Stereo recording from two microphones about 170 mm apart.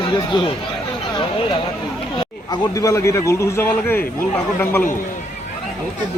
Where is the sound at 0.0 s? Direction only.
30° left (ahead or behind).